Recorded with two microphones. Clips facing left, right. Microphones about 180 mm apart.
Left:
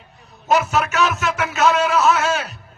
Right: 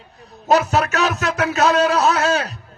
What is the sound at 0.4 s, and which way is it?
A man's voice, 35° right (ahead or behind).